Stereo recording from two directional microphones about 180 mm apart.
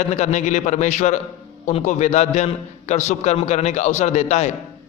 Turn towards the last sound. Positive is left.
turn(degrees=40)  # may be behind; listen again after turning